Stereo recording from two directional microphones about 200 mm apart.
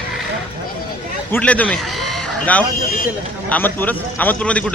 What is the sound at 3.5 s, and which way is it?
A man's voice, 10° left (ahead or behind).